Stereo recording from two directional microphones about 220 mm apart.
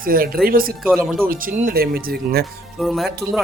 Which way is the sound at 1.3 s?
40° right (ahead or behind).